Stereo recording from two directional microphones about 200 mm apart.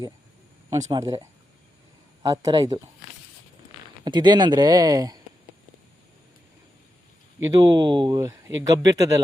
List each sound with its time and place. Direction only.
0.9 s speech: 20° right (ahead or behind)
4.0 s speech: 20° right (ahead or behind)
7.3 s speech: 15° right (ahead or behind)